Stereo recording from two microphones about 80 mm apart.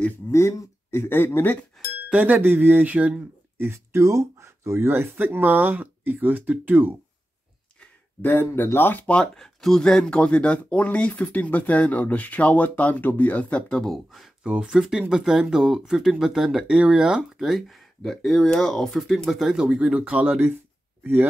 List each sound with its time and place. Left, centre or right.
0.3 s speech: left
2.0 s speech: centre
3.6 s speech: right
7.8 s a sound: left
8.7 s speech: left
14.4 s speech: centre